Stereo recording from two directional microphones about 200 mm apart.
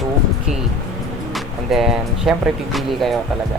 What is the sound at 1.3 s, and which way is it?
Speech, centre (ahead or behind).